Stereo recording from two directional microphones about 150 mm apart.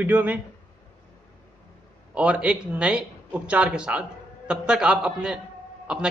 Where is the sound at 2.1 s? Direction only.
10° right (ahead or behind).